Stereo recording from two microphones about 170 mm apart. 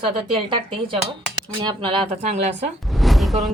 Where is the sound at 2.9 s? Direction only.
Centre (ahead or behind).